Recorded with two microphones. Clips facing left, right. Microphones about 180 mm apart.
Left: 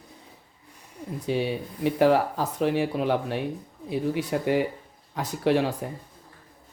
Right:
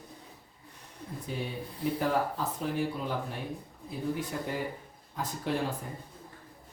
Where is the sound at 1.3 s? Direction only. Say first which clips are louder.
Left 10 dB; 85° left.